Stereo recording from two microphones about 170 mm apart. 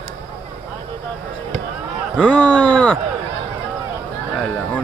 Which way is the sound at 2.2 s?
10° left (ahead or behind).